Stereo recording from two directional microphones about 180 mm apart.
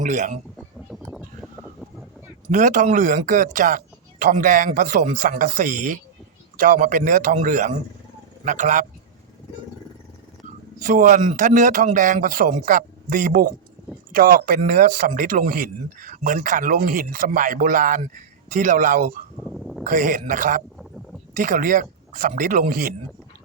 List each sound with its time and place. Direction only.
0.0 s speech: 45° right (ahead or behind)
0.9 s vehicle: centre (ahead or behind)
2.5 s speech: 45° right (ahead or behind)
10.8 s speech: 45° right (ahead or behind)
19.5 s a sound: centre (ahead or behind)
19.8 s speech: 45° right (ahead or behind)